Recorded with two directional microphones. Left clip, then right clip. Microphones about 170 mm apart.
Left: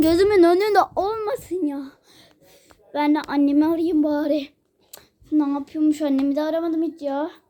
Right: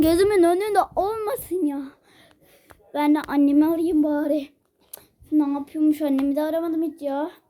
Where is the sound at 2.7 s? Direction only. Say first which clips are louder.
Even; 10° right (ahead or behind).